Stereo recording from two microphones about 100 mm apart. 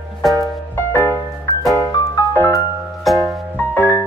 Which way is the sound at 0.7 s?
25° left (ahead or behind).